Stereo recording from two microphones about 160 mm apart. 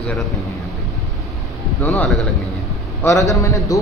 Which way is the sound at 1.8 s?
10° left (ahead or behind).